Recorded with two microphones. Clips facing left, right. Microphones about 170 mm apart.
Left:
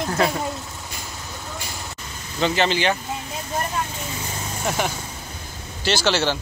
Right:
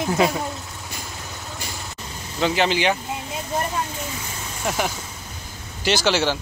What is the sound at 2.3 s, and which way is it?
Speech, 10° right (ahead or behind).